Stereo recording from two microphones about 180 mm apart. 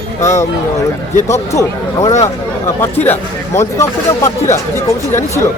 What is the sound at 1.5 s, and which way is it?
Speech, 15° left (ahead or behind).